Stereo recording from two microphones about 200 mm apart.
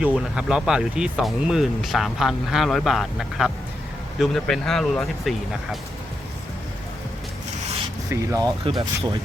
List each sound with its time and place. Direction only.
0.0 s speech: 5° right (ahead or behind)
8.1 s speech: 15° right (ahead or behind)